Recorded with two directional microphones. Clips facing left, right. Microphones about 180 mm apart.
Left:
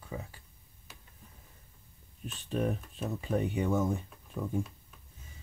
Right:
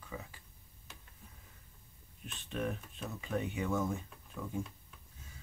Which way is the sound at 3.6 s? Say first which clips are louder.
Left 3 dB; 20° left (ahead or behind).